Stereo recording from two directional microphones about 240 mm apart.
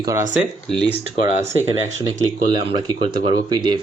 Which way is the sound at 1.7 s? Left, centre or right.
Centre.